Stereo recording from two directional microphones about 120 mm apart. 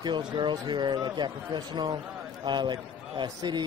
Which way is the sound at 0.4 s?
40° right (ahead or behind).